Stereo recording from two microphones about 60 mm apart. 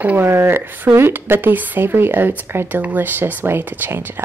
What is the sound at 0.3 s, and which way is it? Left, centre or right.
Speech, right.